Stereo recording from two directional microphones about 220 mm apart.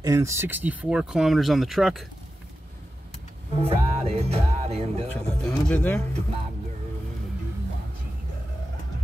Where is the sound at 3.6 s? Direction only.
25° right (ahead or behind).